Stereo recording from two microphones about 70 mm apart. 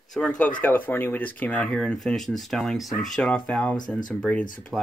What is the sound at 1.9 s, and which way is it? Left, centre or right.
Speech, centre.